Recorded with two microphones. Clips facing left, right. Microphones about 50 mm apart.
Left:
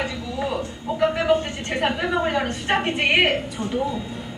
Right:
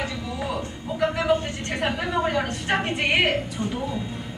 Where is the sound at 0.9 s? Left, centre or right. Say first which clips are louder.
Left 2 dB; centre.